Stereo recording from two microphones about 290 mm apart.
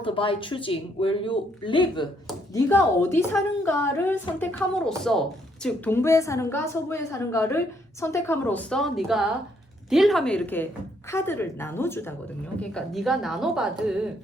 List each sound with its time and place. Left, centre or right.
0.0 s a woman's voice: centre